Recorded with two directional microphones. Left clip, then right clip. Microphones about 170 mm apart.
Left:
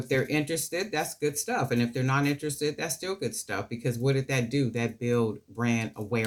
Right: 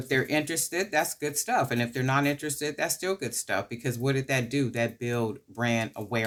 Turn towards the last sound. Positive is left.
turn(degrees=-40)  # may be behind; listen again after turning